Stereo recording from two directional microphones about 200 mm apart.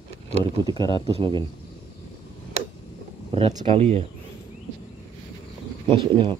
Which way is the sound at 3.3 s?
30° right (ahead or behind).